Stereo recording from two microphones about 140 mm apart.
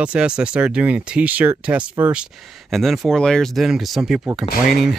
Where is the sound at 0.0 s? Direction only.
5° right (ahead or behind).